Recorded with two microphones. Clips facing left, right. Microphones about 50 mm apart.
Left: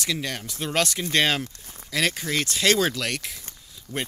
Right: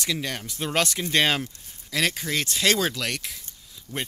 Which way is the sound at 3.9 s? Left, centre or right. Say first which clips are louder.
Left 2 dB; left.